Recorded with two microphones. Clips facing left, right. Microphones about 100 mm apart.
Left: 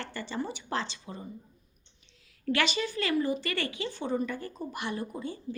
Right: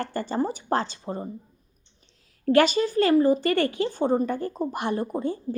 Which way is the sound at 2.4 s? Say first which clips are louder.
Right 10 dB; 40° right (ahead or behind).